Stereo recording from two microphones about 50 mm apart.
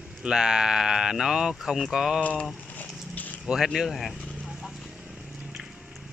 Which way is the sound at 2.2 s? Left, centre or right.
Centre.